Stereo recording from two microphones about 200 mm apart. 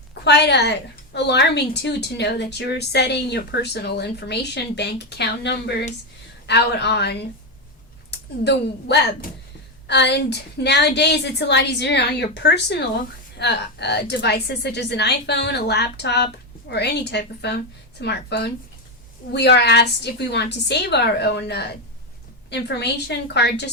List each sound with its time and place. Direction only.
0.1 s a woman's voice: 55° left (ahead or behind)